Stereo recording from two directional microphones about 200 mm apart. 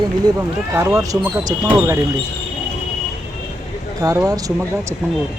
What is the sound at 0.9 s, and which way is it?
Speech, 15° right (ahead or behind).